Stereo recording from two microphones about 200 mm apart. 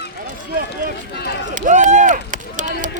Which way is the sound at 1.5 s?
40° right (ahead or behind).